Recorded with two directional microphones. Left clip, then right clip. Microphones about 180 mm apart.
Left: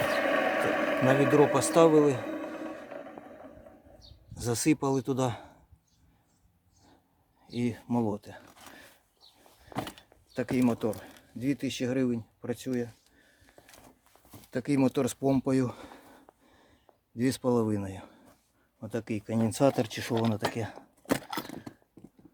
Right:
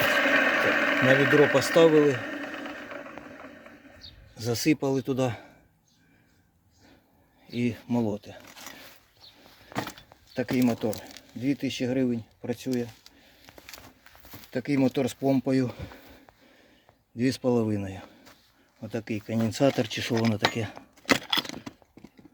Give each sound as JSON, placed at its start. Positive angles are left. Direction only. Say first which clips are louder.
{"t": 0.0, "sound": "speech", "louder": "right 5 dB", "side_deg": 0}
{"t": 4.4, "sound": "speech", "louder": "right 2 dB", "side_deg": 0}
{"t": 7.4, "sound": "speech", "louder": "right 3 dB", "side_deg": -10}
{"t": 8.4, "sound": "a sound", "louder": "right 7 dB", "side_deg": -30}
{"t": 9.8, "sound": "keys jangling", "louder": "right 3 dB", "side_deg": 0}
{"t": 10.7, "sound": "speech", "louder": "right 2 dB", "side_deg": -10}
{"t": 14.3, "sound": "speech", "louder": "right 2 dB", "side_deg": 0}
{"t": 17.2, "sound": "speech", "louder": "right 2 dB", "side_deg": -5}
{"t": 21.1, "sound": "a sound", "louder": "right 7 dB", "side_deg": 0}